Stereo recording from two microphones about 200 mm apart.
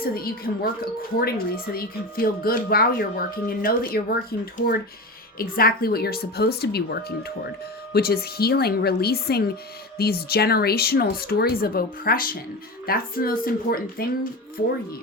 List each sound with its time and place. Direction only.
0.0 s speech: 50° left (ahead or behind)